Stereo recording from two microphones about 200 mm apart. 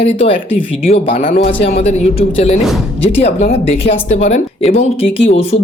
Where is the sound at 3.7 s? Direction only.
30° left (ahead or behind).